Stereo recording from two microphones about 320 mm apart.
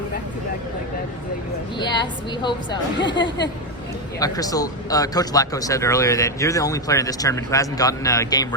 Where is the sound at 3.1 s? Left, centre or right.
Left.